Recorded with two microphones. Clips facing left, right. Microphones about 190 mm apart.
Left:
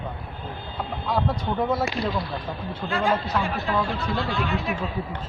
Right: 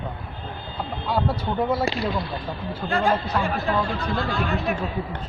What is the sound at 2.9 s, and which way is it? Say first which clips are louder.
Speech: right 1 dB; 50° right (ahead or behind).